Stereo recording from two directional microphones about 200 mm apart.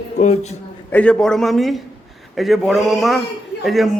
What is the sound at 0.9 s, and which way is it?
A man's voice, 5° left (ahead or behind).